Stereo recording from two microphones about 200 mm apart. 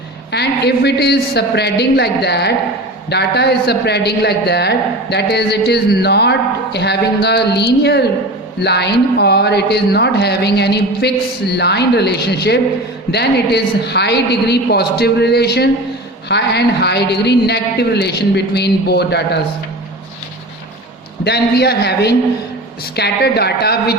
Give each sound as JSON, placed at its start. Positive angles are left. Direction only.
{"t": 0.3, "sound": "speech", "side_deg": 55}
{"t": 21.2, "sound": "speech", "side_deg": 55}